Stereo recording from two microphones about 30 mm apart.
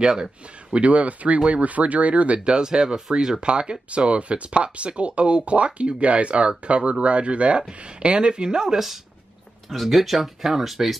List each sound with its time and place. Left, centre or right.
0.0 s a man's voice: right
0.7 s speech: right
8.7 s speech: centre